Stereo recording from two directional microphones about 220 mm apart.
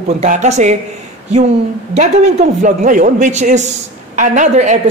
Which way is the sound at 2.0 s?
35° right (ahead or behind).